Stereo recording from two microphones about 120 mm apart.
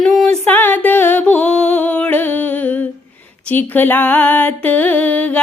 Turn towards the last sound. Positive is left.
turn(degrees=10)  # may be behind; listen again after turning